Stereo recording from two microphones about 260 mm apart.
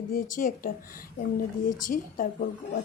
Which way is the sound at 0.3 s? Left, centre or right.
Left.